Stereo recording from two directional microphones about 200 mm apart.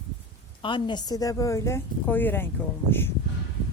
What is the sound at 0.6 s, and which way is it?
Speech, 25° left (ahead or behind).